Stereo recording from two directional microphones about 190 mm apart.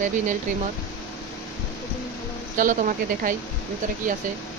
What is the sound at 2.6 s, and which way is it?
Speech, 45° right (ahead or behind).